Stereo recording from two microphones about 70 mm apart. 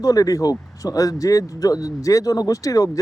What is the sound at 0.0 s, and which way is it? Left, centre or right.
Speech, left.